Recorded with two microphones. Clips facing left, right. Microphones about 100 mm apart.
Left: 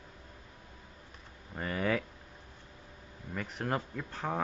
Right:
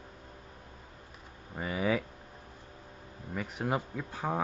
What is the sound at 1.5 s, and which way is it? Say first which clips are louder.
Speech: right 1 dB; 5° right (ahead or behind).